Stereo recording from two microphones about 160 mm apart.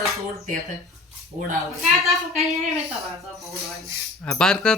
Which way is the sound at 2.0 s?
Centre (ahead or behind).